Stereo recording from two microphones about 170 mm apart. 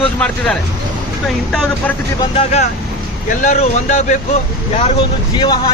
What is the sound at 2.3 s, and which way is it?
Speech, 40° left (ahead or behind).